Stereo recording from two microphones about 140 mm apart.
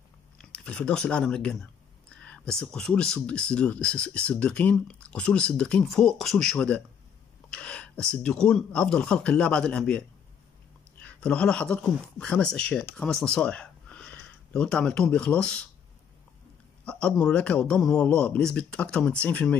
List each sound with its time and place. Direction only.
0.4 s a sound: 10° left (ahead or behind)
2.6 s speech: 5° left (ahead or behind)
16.8 s speech: 5° left (ahead or behind)